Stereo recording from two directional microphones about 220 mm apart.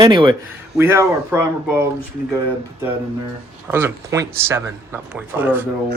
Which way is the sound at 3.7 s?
10° right (ahead or behind).